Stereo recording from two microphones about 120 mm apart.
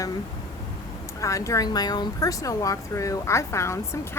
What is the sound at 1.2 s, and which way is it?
A woman's voice, 25° left (ahead or behind).